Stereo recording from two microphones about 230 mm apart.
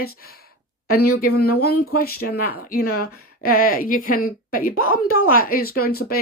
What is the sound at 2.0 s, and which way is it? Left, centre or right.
A woman's voice, left.